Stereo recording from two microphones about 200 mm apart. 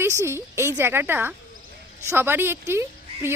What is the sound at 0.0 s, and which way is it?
A woman's voice, 15° right (ahead or behind).